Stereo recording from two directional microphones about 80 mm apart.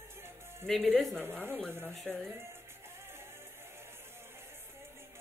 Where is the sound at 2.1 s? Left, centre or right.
Centre.